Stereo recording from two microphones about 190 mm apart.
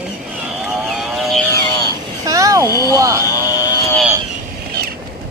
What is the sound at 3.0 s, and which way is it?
Speech, 15° right (ahead or behind).